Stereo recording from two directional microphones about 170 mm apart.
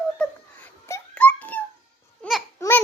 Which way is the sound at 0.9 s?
10° left (ahead or behind).